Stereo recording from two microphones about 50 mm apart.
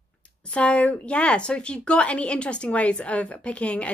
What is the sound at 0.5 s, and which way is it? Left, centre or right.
Speech, left.